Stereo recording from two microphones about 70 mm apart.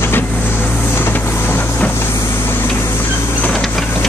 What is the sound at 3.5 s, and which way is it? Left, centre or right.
Printer, centre.